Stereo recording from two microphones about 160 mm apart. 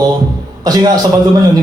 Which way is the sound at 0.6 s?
25° right (ahead or behind).